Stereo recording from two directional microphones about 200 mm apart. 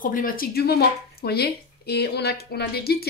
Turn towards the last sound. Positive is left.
turn(degrees=50)  # may be behind; listen again after turning